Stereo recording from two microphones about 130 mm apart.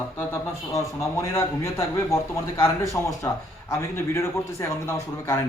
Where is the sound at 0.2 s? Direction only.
20° left (ahead or behind).